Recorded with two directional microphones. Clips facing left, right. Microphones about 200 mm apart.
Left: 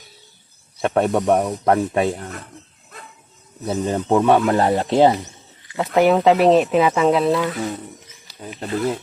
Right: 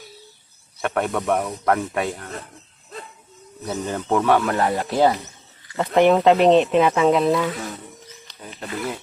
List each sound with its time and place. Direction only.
0.8 s speech: 30° left (ahead or behind)
3.7 s speech: 25° left (ahead or behind)
5.7 s speech: 5° left (ahead or behind)
8.3 s wild animals: 5° left (ahead or behind)